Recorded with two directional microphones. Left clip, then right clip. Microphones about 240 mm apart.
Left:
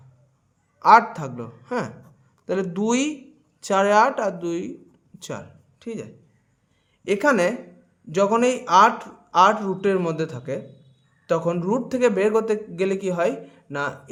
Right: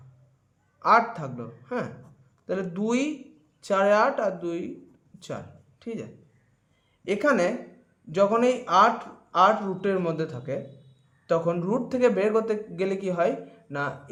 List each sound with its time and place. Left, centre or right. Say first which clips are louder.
0.8 s speech: left 6 dB; left
5.8 s speech: left 3 dB; centre